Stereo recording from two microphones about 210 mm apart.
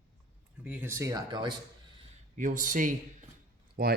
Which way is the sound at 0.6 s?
10° right (ahead or behind).